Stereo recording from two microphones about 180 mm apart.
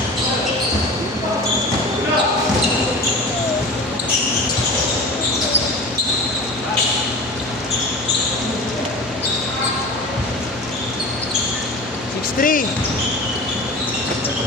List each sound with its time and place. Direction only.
12.4 s basketball bounce: 50° left (ahead or behind)